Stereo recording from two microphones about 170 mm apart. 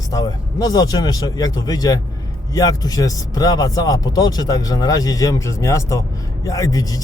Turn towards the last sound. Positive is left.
turn(degrees=20)  # may be behind; listen again after turning